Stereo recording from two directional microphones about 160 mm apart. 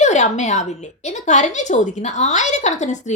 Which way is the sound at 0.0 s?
45° left (ahead or behind).